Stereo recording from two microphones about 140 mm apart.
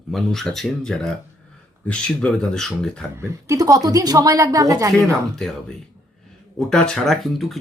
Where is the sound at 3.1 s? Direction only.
20° right (ahead or behind).